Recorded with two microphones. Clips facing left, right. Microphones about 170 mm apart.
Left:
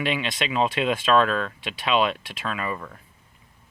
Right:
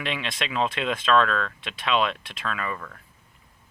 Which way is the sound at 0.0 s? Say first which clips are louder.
Left 4 dB; 5° left (ahead or behind).